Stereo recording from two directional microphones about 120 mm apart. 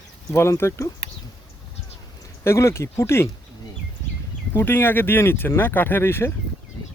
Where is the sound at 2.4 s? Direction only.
20° left (ahead or behind).